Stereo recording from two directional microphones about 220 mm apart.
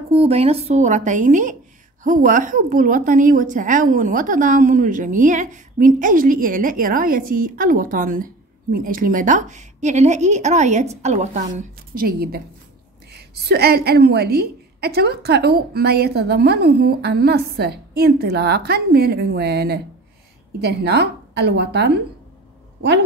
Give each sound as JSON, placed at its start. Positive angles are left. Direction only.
{"t": 0.1, "sound": "a woman's voice", "side_deg": -30}